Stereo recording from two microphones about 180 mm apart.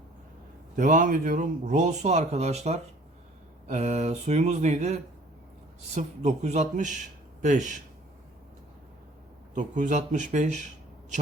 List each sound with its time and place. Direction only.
0.8 s speech: 45° right (ahead or behind)
9.6 s speech: 45° right (ahead or behind)